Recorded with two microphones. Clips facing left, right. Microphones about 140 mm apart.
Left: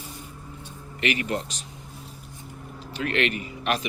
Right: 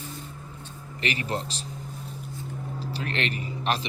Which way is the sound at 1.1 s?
35° right (ahead or behind).